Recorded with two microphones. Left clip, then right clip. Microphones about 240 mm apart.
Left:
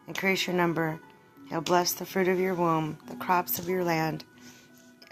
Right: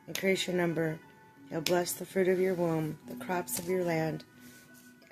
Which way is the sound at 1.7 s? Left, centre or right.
Centre.